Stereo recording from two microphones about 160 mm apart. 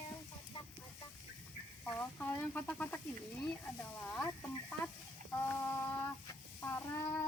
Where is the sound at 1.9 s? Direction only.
10° left (ahead or behind).